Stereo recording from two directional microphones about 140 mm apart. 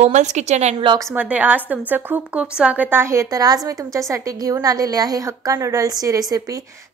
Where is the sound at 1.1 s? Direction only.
10° right (ahead or behind).